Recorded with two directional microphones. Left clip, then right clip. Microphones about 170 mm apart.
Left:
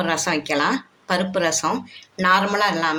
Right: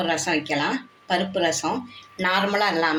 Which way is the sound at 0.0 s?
90° left.